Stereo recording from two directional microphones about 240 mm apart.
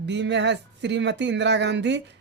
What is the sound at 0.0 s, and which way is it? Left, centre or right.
Speech, right.